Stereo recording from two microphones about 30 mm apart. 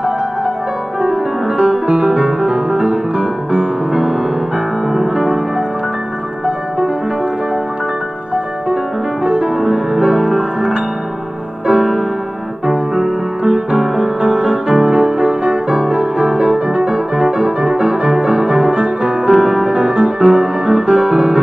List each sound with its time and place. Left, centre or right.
1.0 s music: right
9.2 s music: right
9.6 s music: right